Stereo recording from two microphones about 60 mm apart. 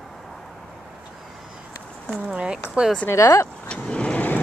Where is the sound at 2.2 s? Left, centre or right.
Centre.